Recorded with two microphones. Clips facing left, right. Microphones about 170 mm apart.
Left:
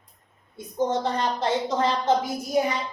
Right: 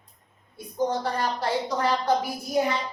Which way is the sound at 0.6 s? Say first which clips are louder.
Left 2 dB; 25° left (ahead or behind).